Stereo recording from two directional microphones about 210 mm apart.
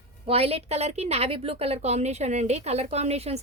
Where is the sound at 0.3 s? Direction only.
30° right (ahead or behind).